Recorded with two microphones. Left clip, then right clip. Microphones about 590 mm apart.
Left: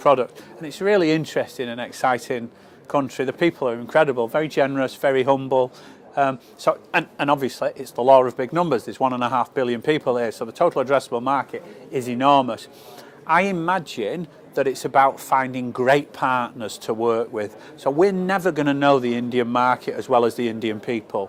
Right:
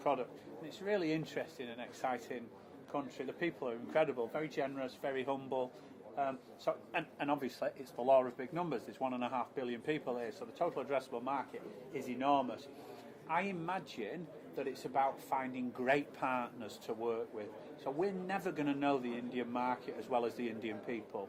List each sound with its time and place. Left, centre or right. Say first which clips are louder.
0.0 s a man's voice: left 19 dB; left
6.1 s speech: left 17 dB; left
7.6 s a man's voice: left 17 dB; left